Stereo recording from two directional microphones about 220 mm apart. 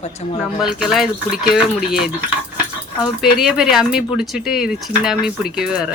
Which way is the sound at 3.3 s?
Centre (ahead or behind).